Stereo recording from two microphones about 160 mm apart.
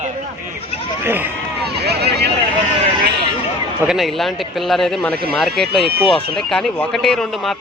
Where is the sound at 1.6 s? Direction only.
90° right.